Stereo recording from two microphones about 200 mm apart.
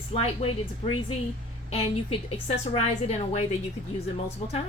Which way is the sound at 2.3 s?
30° left (ahead or behind).